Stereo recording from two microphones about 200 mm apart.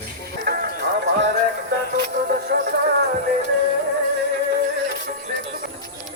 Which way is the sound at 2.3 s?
45° right (ahead or behind).